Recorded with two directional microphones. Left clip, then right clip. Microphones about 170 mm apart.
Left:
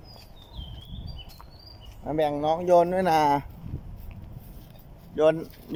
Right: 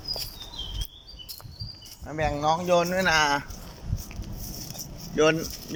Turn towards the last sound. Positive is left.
turn(degrees=15)  # may be behind; listen again after turning